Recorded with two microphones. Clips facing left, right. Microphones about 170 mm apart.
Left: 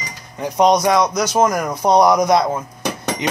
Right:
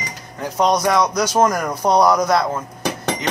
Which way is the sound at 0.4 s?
15° left (ahead or behind).